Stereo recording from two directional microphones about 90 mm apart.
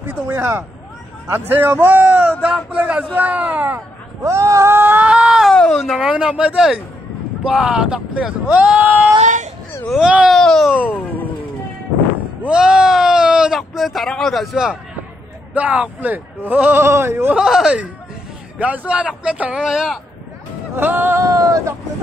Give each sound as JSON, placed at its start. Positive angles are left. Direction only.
{"t": 0.0, "sound": "a man's voice", "side_deg": -25}
{"t": 4.2, "sound": "a sound", "side_deg": -35}
{"t": 5.5, "sound": "a sound", "side_deg": 5}
{"t": 5.9, "sound": "speech", "side_deg": -10}
{"t": 9.8, "sound": "speech", "side_deg": -5}
{"t": 10.4, "sound": "speech", "side_deg": 5}
{"t": 12.4, "sound": "speech", "side_deg": -10}
{"t": 16.8, "sound": "a sound", "side_deg": -30}
{"t": 17.3, "sound": "speech", "side_deg": -5}
{"t": 20.7, "sound": "speech", "side_deg": -20}
{"t": 21.2, "sound": "speech", "side_deg": -35}